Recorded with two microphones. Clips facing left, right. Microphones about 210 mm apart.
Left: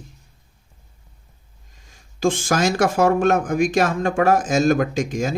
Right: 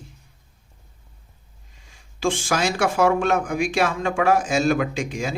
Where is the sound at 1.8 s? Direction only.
40° left (ahead or behind).